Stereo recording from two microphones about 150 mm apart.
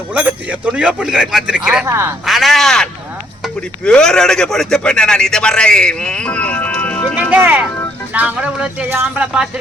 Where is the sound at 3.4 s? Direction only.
5° left (ahead or behind).